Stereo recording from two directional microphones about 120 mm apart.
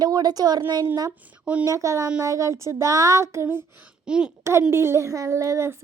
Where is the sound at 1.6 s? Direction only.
25° right (ahead or behind).